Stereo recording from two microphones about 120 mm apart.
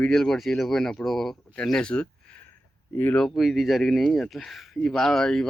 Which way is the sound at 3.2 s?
Centre (ahead or behind).